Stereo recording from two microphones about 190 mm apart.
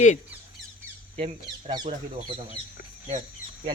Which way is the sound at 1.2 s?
25° right (ahead or behind).